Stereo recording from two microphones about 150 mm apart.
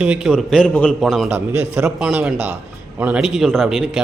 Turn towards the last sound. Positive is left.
turn(degrees=0)  # may be behind; listen again after turning